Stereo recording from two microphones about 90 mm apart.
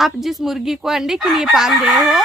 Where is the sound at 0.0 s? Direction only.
Centre (ahead or behind).